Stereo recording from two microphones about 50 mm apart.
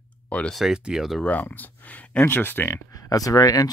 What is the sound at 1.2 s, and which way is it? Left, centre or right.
Speech, left.